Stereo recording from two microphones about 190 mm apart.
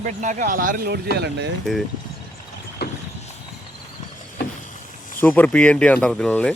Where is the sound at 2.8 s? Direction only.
55° left (ahead or behind).